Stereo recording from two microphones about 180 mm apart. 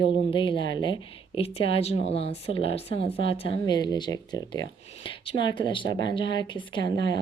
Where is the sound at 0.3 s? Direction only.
30° left (ahead or behind).